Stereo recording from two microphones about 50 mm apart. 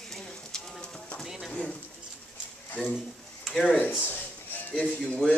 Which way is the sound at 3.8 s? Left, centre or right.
Left.